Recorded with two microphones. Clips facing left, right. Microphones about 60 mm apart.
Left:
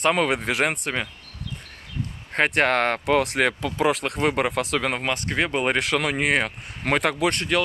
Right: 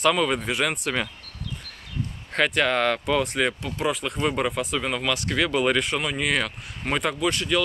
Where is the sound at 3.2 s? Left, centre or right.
Left.